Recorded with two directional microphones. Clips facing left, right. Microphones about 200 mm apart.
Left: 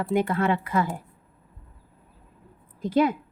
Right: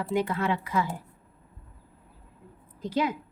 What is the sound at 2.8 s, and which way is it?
Speech, 50° left (ahead or behind).